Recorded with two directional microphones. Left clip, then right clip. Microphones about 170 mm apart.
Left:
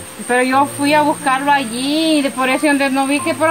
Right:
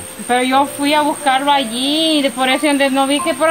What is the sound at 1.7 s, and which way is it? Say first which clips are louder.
Speech: right 1 dB; 30° left (ahead or behind).